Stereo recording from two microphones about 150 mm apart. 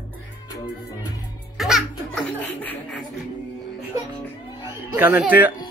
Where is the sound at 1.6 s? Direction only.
Centre (ahead or behind).